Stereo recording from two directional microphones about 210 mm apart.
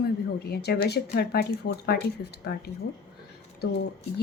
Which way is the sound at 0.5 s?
50° left (ahead or behind).